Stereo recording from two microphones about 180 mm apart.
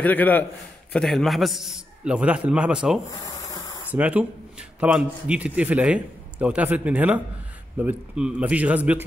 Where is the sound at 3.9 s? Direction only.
5° right (ahead or behind).